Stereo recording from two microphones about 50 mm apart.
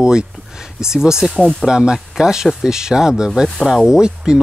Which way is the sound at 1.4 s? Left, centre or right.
Centre.